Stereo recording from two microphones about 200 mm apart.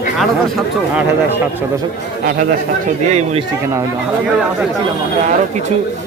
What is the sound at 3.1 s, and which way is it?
Speech, 35° right (ahead or behind).